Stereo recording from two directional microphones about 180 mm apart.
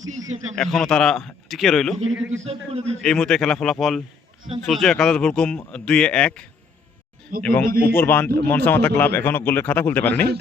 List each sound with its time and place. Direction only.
0.5 s speech: 5° left (ahead or behind)
2.1 s a man's voice: 10° right (ahead or behind)
2.4 s a man's voice: 35° right (ahead or behind)
3.0 s a man's voice: 5° left (ahead or behind)